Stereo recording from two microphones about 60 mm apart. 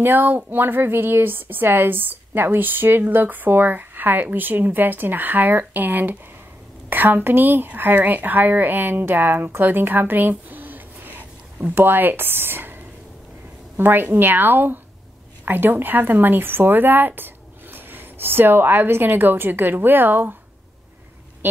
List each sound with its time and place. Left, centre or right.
0.0 s a woman's voice: right
13.7 s a woman's voice: right